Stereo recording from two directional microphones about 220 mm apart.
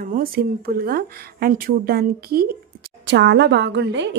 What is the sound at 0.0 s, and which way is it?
A woman's voice, 40° right (ahead or behind).